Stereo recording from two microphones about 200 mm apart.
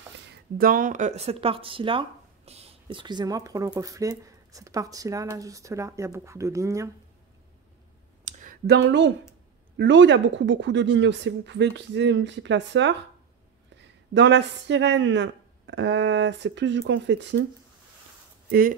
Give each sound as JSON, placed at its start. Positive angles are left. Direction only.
{"t": 0.1, "sound": "speech", "side_deg": -45}
{"t": 8.3, "sound": "a sound", "side_deg": -40}
{"t": 8.7, "sound": "speech", "side_deg": -65}
{"t": 14.1, "sound": "speech", "side_deg": -60}
{"t": 18.5, "sound": "speech", "side_deg": -45}